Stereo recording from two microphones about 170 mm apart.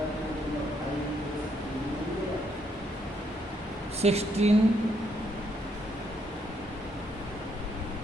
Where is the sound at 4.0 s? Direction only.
40° right (ahead or behind).